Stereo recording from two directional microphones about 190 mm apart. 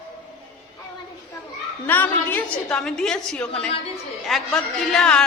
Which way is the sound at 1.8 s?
10° left (ahead or behind).